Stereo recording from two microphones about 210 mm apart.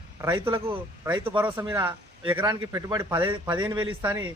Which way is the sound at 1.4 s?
10° right (ahead or behind).